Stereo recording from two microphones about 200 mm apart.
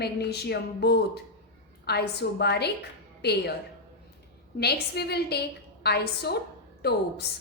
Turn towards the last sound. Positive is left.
turn(degrees=55)  # may be behind; listen again after turning